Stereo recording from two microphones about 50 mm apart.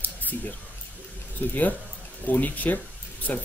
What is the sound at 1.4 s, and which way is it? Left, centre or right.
Speech, left.